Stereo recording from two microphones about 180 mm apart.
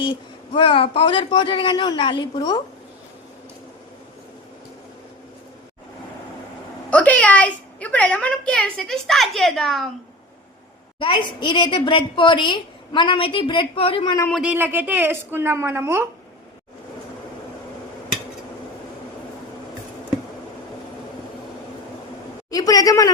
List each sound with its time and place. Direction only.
0.0 s a woman's voice: 25° left (ahead or behind)
6.9 s a woman's voice: 10° left (ahead or behind)
11.0 s a woman's voice: 25° left (ahead or behind)
14.3 s speech: centre (ahead or behind)
14.5 s a woman's voice: 10° right (ahead or behind)
22.4 s a woman's voice: 20° left (ahead or behind)